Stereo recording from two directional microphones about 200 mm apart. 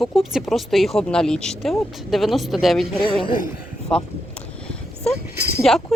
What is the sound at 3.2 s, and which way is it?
Speech, 45° left (ahead or behind).